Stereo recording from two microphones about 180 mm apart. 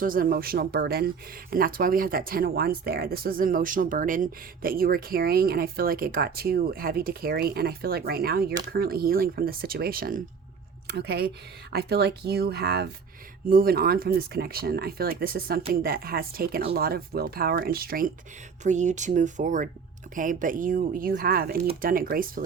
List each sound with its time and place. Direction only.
0.0 s speech: 55° right (ahead or behind)
10.8 s speech: 65° right (ahead or behind)
18.6 s speech: 40° right (ahead or behind)